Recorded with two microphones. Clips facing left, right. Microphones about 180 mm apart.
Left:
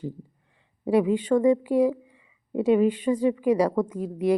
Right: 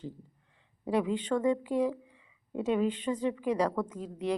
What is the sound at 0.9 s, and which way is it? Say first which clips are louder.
Speech: left 8 dB; 10° left (ahead or behind).